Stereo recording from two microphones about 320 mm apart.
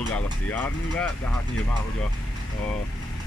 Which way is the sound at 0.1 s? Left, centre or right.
Centre.